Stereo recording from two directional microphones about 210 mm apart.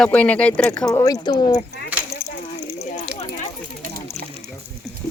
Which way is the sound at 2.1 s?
45° left (ahead or behind).